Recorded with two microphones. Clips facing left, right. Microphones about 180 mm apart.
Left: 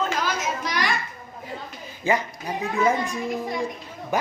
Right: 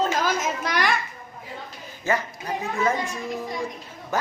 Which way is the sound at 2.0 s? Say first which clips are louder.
Left 2 dB; 15° left (ahead or behind).